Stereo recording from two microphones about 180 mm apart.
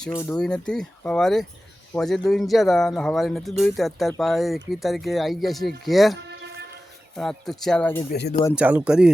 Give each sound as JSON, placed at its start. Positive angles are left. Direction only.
{"t": 0.2, "sound": "speech", "side_deg": 10}
{"t": 7.2, "sound": "speech", "side_deg": 0}
{"t": 8.5, "sound": "speech", "side_deg": -5}